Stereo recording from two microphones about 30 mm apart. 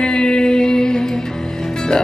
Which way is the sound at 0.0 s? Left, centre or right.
Left.